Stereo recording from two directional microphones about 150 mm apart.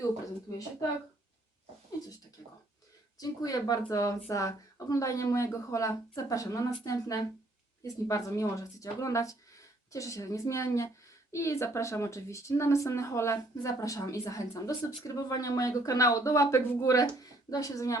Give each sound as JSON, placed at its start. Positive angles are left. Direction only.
{"t": 3.2, "sound": "speech", "side_deg": 25}